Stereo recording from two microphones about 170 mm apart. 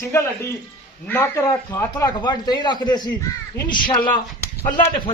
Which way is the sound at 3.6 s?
10° left (ahead or behind).